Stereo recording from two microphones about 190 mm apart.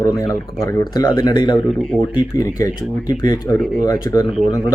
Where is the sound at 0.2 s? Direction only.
15° left (ahead or behind).